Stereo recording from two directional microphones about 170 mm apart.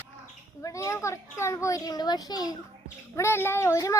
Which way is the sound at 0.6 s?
20° left (ahead or behind).